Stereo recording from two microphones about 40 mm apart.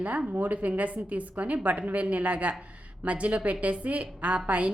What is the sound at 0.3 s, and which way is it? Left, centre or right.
A woman's voice, right.